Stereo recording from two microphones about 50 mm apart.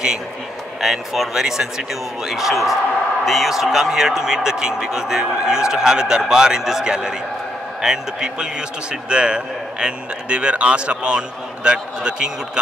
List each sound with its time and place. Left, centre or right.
0.7 s a man's voice: centre